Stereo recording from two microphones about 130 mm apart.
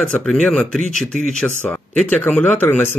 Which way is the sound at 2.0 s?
10° left (ahead or behind).